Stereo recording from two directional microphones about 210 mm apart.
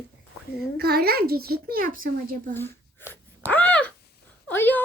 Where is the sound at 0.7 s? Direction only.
50° right (ahead or behind).